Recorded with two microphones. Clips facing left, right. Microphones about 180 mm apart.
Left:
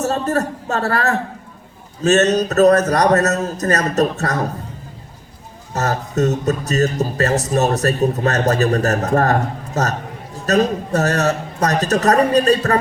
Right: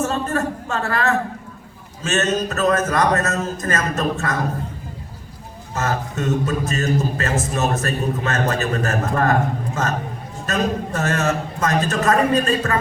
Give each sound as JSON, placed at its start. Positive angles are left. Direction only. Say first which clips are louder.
{"t": 0.0, "sound": "speech", "louder": "left 3 dB", "side_deg": 40}
{"t": 5.7, "sound": "speech", "louder": "left 4 dB", "side_deg": 40}